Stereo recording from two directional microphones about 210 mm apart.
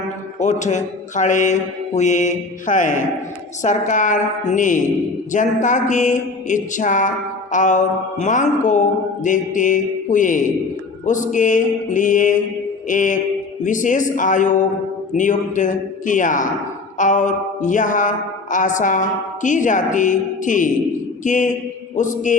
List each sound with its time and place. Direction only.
0.3 s speech: 35° left (ahead or behind)